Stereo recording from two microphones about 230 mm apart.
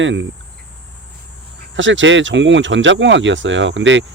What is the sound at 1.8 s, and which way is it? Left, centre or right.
Speech, right.